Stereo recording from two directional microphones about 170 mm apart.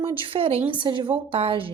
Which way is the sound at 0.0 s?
35° right (ahead or behind).